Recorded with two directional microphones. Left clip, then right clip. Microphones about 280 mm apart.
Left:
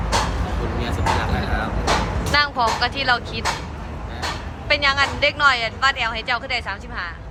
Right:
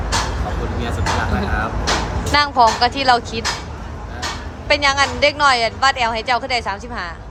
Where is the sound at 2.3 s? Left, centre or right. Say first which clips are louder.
Right 5 dB; centre.